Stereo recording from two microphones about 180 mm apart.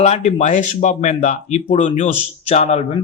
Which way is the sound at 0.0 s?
40° left (ahead or behind).